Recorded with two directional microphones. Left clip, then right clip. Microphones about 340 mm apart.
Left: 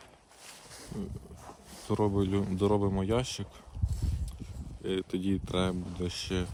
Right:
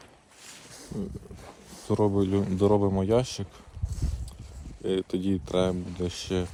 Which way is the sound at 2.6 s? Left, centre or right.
Centre.